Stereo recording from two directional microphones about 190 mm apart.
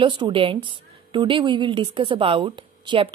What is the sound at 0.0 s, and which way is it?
A woman's voice, 25° right (ahead or behind).